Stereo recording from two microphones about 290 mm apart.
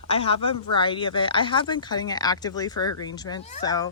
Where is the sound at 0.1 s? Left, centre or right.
Centre.